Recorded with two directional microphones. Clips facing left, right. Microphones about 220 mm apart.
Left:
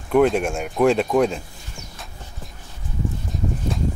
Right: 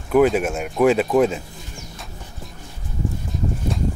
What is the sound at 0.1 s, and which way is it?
Speech, 5° right (ahead or behind).